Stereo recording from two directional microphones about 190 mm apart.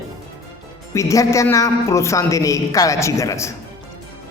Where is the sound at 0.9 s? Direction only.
15° left (ahead or behind).